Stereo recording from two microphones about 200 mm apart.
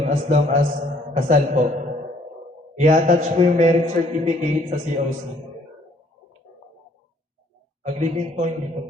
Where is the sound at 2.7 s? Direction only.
35° right (ahead or behind).